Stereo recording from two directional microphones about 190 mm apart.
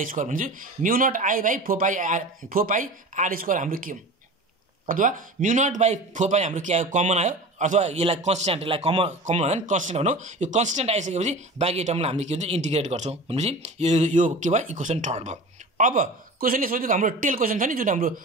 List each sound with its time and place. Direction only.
0.1 s speech: 45° right (ahead or behind)